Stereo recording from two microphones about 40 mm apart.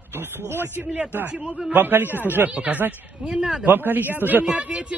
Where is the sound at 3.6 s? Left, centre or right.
Right.